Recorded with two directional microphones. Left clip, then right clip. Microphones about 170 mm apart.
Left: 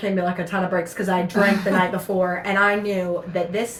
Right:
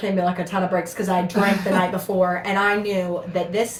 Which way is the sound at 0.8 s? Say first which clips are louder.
Even; 20° right (ahead or behind).